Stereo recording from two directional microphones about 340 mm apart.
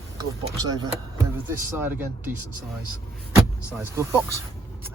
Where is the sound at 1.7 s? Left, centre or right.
Centre.